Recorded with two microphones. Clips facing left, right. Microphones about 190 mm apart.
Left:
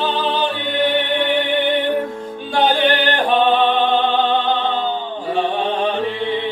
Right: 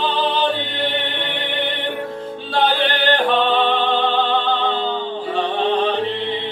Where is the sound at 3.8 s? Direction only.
20° left (ahead or behind).